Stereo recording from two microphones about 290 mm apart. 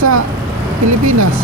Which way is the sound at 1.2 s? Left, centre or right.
Right.